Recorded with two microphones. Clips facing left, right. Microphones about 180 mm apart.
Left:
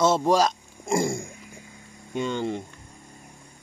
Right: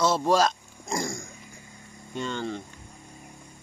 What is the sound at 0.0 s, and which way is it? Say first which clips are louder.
Speech: left 2 dB; 20° left (ahead or behind).